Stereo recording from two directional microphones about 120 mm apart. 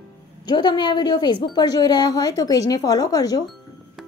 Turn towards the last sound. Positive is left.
turn(degrees=30)  # may be behind; listen again after turning